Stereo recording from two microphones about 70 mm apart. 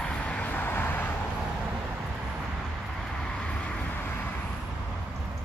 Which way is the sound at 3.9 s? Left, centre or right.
Left.